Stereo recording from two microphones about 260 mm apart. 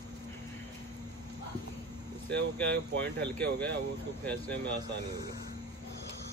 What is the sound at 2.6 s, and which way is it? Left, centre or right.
Speech, right.